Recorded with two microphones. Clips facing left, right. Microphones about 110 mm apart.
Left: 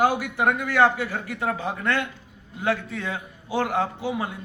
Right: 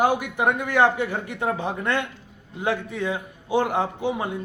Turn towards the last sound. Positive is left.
turn(degrees=-20)  # may be behind; listen again after turning